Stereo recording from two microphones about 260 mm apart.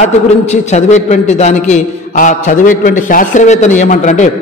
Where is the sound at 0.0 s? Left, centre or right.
Left.